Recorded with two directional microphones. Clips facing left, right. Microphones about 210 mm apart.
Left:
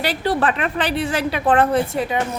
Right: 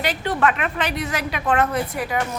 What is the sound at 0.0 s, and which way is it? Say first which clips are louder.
A woman's voice: left 2 dB; 35° left (ahead or behind).